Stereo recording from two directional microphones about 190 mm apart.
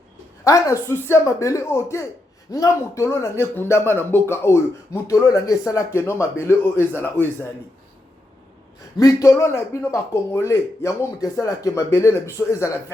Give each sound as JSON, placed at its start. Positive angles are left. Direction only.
{"t": 0.4, "sound": "a man's voice", "side_deg": 15}
{"t": 9.0, "sound": "a man's voice", "side_deg": 15}